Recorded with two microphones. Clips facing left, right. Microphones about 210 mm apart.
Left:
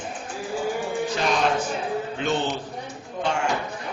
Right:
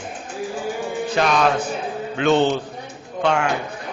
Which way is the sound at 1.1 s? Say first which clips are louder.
Right 6 dB; 70° right (ahead or behind).